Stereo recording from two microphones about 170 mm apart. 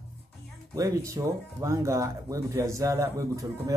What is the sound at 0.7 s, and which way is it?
Speech, 20° right (ahead or behind).